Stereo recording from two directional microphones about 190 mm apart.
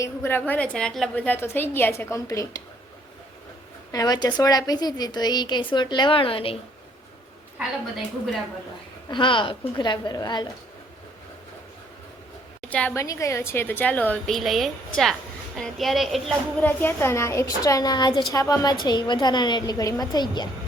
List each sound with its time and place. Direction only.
0.0 s a woman's voice: 10° left (ahead or behind)
3.9 s a woman's voice: 20° left (ahead or behind)
9.0 s a woman's voice: 25° left (ahead or behind)
12.7 s a woman's voice: 10° left (ahead or behind)